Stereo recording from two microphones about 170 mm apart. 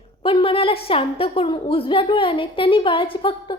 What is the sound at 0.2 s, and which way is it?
A woman's voice, 30° left (ahead or behind).